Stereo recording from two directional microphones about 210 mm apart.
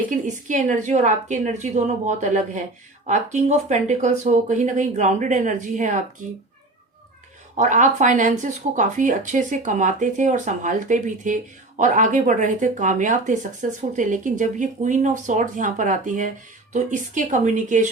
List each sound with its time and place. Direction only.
0.3 s speech: 35° right (ahead or behind)
7.5 s speech: 35° right (ahead or behind)